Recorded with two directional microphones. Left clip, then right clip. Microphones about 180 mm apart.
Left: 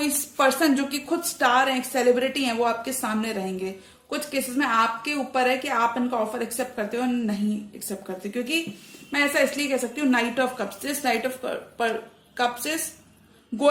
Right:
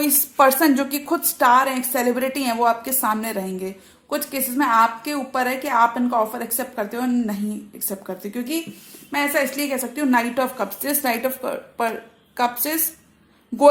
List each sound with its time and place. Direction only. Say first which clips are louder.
0.0 s a woman's voice: right 5 dB; 50° right (ahead or behind)
12.4 s a woman's voice: right 3 dB; 50° right (ahead or behind)